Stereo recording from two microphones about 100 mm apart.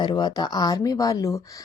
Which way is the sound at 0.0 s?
45° left (ahead or behind).